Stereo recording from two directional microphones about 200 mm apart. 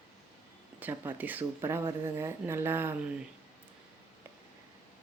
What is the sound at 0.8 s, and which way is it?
Speech, 10° right (ahead or behind).